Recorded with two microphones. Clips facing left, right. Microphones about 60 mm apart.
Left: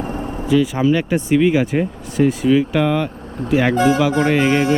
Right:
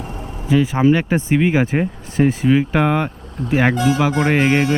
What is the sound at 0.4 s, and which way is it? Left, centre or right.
Speech, right.